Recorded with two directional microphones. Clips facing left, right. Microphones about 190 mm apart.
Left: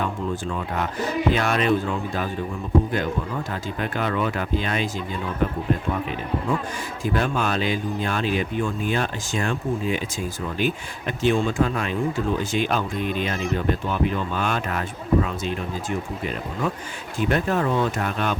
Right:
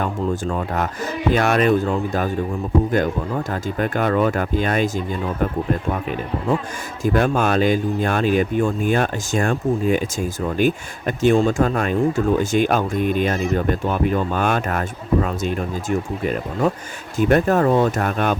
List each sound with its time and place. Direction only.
0.4 s speech: 45° right (ahead or behind)
7.0 s speech: 45° right (ahead or behind)